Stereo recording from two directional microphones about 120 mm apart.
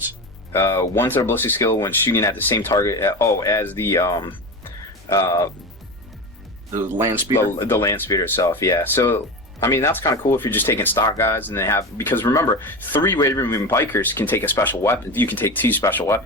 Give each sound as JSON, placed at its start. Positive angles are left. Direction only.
{"t": 0.5, "sound": "speech", "side_deg": 20}
{"t": 6.7, "sound": "speech", "side_deg": -20}
{"t": 7.5, "sound": "speech", "side_deg": 20}